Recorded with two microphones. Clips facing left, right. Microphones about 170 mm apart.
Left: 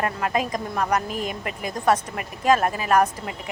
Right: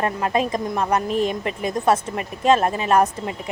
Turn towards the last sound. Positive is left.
turn(degrees=-25)  # may be behind; listen again after turning